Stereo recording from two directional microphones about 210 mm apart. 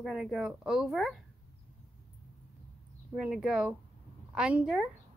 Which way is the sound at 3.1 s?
5° right (ahead or behind).